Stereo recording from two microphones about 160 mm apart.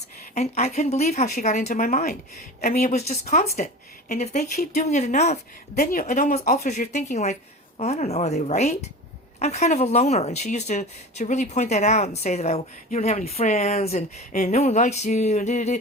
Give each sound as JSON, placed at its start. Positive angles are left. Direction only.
{"t": 0.3, "sound": "speech", "side_deg": 45}
{"t": 5.7, "sound": "speech", "side_deg": 65}